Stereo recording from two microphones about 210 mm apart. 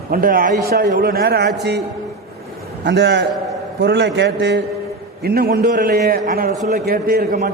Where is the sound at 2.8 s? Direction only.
55° right (ahead or behind).